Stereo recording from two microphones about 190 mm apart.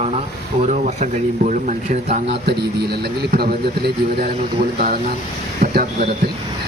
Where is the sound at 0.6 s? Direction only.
35° right (ahead or behind).